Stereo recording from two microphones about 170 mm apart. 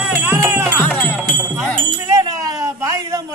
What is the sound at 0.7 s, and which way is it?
Music, 10° left (ahead or behind).